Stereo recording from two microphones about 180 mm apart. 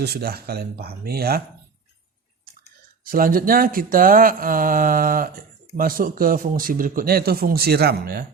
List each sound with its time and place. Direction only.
0.0 s speech: 60° right (ahead or behind)
3.0 s speech: 50° right (ahead or behind)